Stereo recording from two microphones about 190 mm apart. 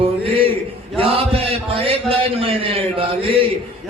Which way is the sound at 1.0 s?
30° right (ahead or behind).